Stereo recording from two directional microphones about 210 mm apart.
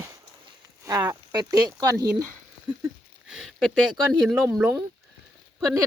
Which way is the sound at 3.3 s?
Centre (ahead or behind).